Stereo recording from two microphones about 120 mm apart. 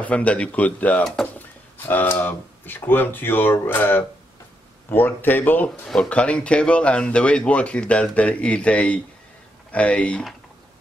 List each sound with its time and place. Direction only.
0.0 s speech: 10° left (ahead or behind)
1.0 s speech: centre (ahead or behind)
1.8 s speech: 15° left (ahead or behind)